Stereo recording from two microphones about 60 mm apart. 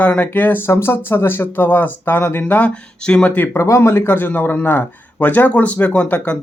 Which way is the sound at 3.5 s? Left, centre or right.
Left.